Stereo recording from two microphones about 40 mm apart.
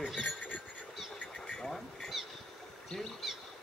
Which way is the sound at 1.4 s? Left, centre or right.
Centre.